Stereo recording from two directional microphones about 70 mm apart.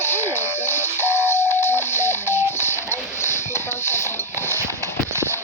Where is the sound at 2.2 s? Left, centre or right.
Right.